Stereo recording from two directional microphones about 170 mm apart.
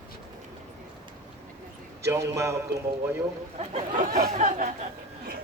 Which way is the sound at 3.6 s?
45° right (ahead or behind).